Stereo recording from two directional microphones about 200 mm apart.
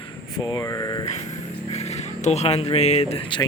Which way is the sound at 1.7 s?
35° left (ahead or behind).